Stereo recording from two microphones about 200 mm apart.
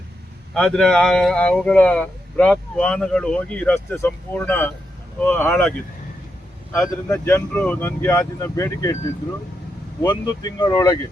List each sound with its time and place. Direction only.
0.5 s speech: 5° left (ahead or behind)
6.7 s speech: 10° left (ahead or behind)
10.0 s speech: 20° left (ahead or behind)